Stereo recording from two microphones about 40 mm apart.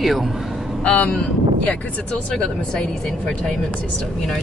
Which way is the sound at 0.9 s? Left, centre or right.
Left.